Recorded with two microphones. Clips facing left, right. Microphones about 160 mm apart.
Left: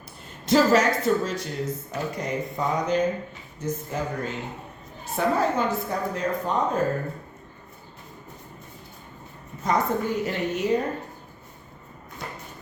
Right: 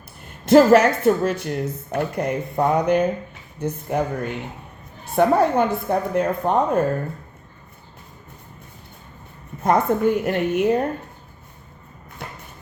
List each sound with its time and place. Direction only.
0.4 s speech: 60° right (ahead or behind)
9.6 s speech: 55° right (ahead or behind)
12.2 s thump: 60° right (ahead or behind)